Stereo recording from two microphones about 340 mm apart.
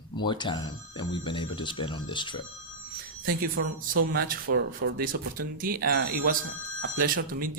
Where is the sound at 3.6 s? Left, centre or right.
Right.